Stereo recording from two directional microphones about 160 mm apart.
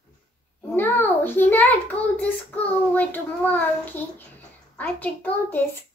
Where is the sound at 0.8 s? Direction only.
15° left (ahead or behind).